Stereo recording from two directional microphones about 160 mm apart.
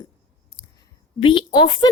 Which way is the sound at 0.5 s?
25° left (ahead or behind).